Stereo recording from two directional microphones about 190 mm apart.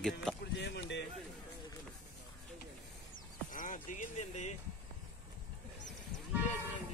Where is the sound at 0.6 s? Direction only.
65° left (ahead or behind).